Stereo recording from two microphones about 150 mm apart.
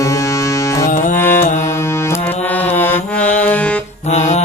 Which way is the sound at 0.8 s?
60° left (ahead or behind).